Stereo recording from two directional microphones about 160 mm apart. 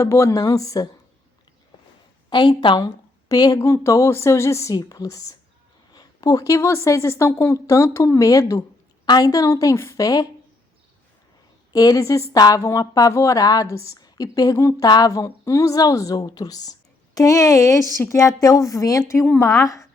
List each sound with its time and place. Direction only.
0.0 s speech: 20° left (ahead or behind)
2.3 s speech: 25° left (ahead or behind)
11.7 s speech: 20° left (ahead or behind)